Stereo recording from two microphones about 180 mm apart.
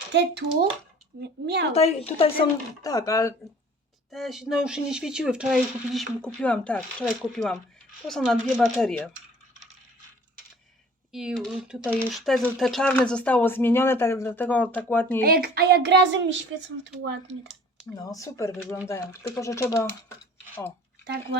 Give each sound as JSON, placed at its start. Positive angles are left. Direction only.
{"t": 0.1, "sound": "a woman's voice", "side_deg": -70}
{"t": 1.7, "sound": "speech", "side_deg": 35}
{"t": 2.8, "sound": "speech", "side_deg": 20}
{"t": 4.1, "sound": "speech", "side_deg": 0}
{"t": 11.1, "sound": "speech", "side_deg": -5}
{"t": 15.2, "sound": "a woman's voice", "side_deg": -55}
{"t": 18.0, "sound": "speech", "side_deg": 20}